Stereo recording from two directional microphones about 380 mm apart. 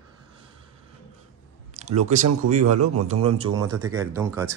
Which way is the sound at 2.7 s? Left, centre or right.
Right.